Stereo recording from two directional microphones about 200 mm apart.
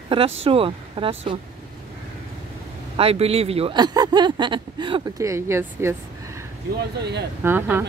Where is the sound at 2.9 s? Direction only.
30° right (ahead or behind); by 6.0 s 15° right (ahead or behind).